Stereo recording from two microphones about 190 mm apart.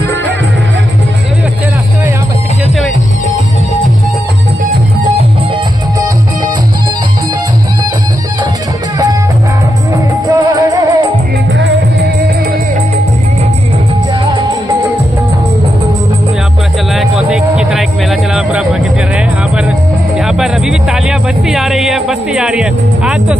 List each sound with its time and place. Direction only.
10.2 s music: 20° right (ahead or behind)
11.5 s music: 70° right (ahead or behind)
16.9 s music: centre (ahead or behind)